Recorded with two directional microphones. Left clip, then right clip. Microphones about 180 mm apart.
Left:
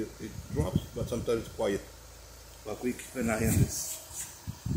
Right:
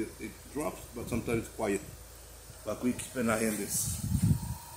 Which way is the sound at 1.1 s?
10° right (ahead or behind).